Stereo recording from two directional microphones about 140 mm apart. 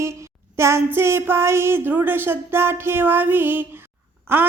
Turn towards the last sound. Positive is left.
turn(degrees=-15)  # may be behind; listen again after turning